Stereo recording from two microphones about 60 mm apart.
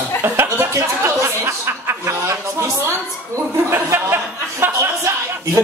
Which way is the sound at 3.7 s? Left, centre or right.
Right.